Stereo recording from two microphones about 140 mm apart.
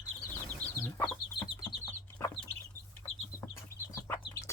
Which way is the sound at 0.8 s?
15° left (ahead or behind).